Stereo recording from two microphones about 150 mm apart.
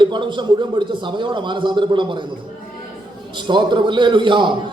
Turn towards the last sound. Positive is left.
turn(degrees=-30)  # may be behind; listen again after turning